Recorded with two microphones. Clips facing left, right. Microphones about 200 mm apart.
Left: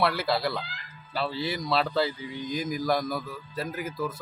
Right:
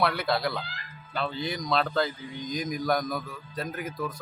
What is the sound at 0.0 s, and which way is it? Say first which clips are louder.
Speech: even; centre (ahead or behind).